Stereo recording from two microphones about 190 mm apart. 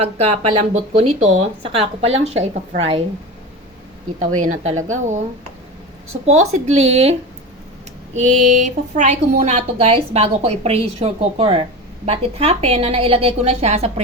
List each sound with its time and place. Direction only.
0.0 s a woman's voice: 30° right (ahead or behind)
4.2 s a woman's voice: 40° right (ahead or behind)
6.2 s a woman's voice: 35° right (ahead or behind)